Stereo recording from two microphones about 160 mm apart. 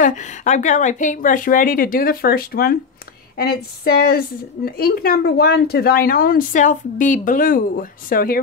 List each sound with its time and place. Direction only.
0.0 s speech: 50° left (ahead or behind); by 2.8 s 70° left (ahead or behind)
3.3 s a sound: 80° left
4.6 s speech: 70° left (ahead or behind)